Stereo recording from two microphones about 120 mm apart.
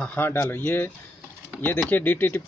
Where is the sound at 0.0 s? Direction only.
15° left (ahead or behind).